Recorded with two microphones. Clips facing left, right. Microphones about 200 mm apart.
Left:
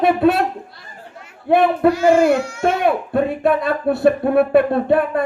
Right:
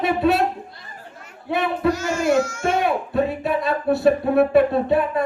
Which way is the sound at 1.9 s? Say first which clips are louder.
Left 6 dB; 45° right (ahead or behind).